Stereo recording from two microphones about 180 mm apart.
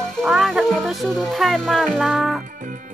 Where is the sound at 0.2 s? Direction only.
Centre (ahead or behind).